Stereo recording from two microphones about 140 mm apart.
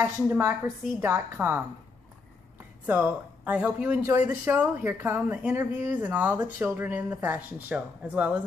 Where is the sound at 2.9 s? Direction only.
10° right (ahead or behind).